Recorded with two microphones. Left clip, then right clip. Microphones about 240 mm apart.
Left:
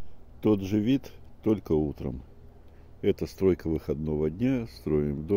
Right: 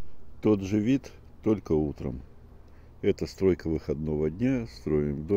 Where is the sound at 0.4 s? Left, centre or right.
Centre.